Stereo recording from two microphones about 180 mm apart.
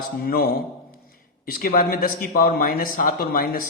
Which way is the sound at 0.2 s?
55° left (ahead or behind).